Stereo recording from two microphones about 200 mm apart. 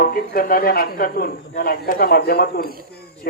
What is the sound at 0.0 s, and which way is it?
Speech, 45° left (ahead or behind).